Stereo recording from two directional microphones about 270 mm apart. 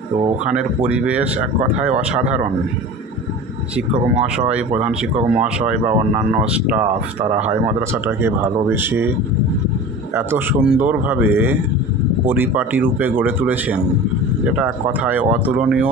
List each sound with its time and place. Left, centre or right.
0.5 s speech: centre
4.7 s speech: right
6.4 s speech: centre
10.1 s speech: centre